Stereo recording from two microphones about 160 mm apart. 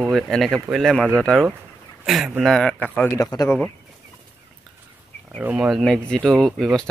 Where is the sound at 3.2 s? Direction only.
20° left (ahead or behind).